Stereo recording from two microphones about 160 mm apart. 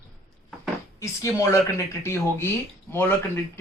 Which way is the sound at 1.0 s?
20° left (ahead or behind).